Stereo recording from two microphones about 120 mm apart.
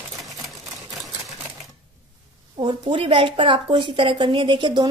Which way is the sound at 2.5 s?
45° right (ahead or behind).